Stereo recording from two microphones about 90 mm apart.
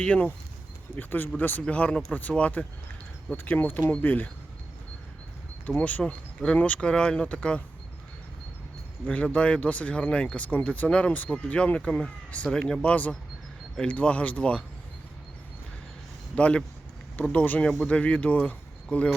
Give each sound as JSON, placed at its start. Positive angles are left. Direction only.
{"t": 0.0, "sound": "speech", "side_deg": 15}
{"t": 5.6, "sound": "speech", "side_deg": 15}
{"t": 9.0, "sound": "speech", "side_deg": 15}
{"t": 16.3, "sound": "speech", "side_deg": 15}